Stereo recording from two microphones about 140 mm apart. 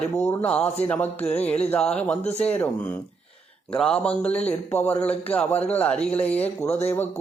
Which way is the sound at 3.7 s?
10° left (ahead or behind).